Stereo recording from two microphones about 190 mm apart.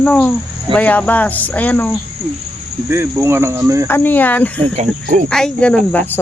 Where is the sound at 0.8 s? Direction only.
10° left (ahead or behind).